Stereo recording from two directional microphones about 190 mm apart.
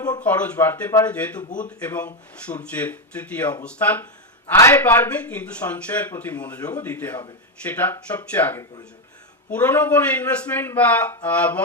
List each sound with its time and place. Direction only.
0.2 s a man's voice: 5° left (ahead or behind)
1.5 s speech: 45° left (ahead or behind)
1.8 s a man's voice: 10° left (ahead or behind)